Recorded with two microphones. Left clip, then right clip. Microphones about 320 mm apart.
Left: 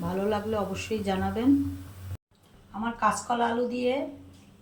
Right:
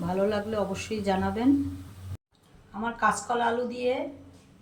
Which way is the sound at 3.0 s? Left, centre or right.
Centre.